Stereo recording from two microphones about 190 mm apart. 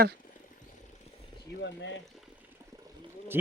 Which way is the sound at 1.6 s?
65° left (ahead or behind).